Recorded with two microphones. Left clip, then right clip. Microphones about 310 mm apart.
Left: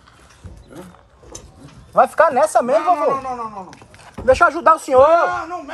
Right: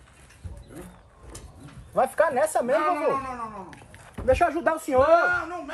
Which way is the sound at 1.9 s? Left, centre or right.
Centre.